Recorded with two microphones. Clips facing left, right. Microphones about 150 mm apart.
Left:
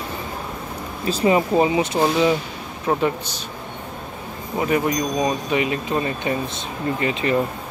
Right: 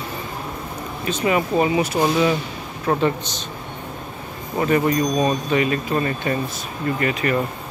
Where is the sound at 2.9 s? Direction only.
10° left (ahead or behind).